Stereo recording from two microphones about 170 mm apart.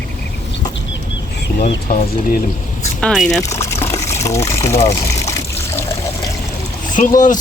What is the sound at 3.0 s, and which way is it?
Speech, centre (ahead or behind).